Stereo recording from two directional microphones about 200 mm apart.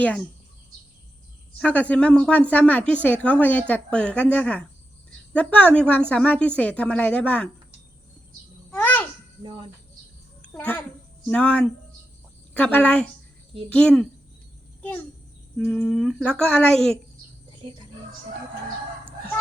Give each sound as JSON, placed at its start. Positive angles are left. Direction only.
{"t": 1.5, "sound": "a woman's voice", "side_deg": 5}
{"t": 8.7, "sound": "babbling", "side_deg": 10}
{"t": 10.4, "sound": "a child's voice", "side_deg": 5}
{"t": 15.5, "sound": "speech", "side_deg": 0}
{"t": 17.6, "sound": "speech", "side_deg": -25}